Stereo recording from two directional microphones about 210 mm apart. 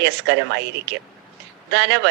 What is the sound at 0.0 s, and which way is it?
A woman's voice, 55° right (ahead or behind).